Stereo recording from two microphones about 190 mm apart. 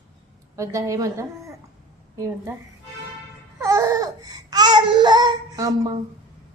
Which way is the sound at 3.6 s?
15° right (ahead or behind).